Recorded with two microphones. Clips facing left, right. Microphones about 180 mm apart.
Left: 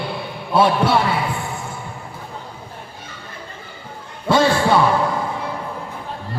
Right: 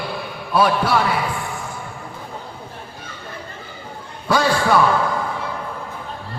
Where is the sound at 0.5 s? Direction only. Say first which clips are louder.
Left 2 dB; 25° left (ahead or behind).